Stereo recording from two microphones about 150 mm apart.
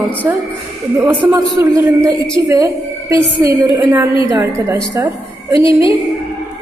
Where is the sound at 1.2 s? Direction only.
20° right (ahead or behind).